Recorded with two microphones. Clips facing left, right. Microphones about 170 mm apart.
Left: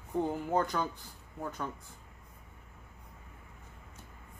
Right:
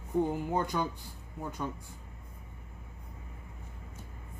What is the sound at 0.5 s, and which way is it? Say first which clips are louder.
Music: even; 15° right (ahead or behind).